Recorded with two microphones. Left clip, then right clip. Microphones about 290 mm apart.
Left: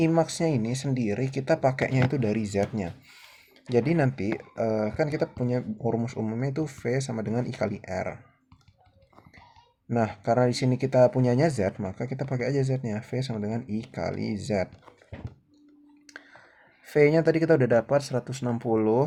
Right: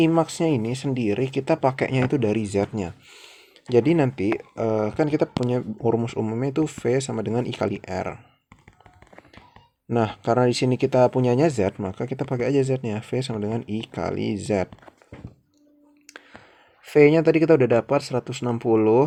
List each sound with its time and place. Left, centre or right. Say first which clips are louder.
0.0 s speech: right 4 dB; right
9.9 s speech: right 3 dB; right
16.8 s speech: right 5 dB; right